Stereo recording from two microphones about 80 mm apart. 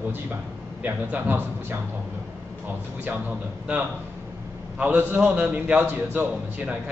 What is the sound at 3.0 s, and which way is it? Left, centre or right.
A man's voice, centre.